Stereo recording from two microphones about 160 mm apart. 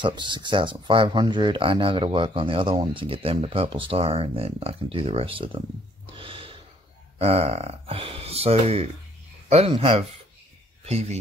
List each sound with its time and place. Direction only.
0.0 s speech: 30° right (ahead or behind)
6.0 s snort: 35° right (ahead or behind)
7.2 s speech: 40° right (ahead or behind)